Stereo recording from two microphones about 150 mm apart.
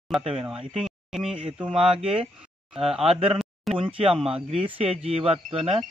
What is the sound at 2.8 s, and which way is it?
Speech, 40° right (ahead or behind).